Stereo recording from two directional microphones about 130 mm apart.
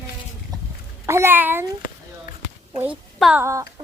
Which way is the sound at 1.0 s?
20° right (ahead or behind).